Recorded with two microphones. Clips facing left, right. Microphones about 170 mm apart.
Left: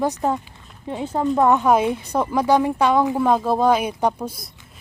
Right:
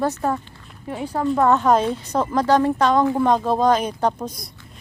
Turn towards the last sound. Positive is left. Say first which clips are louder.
# even
turn(degrees=10)  # may be behind; listen again after turning